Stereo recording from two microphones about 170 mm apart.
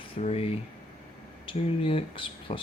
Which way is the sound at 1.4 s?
35° left (ahead or behind).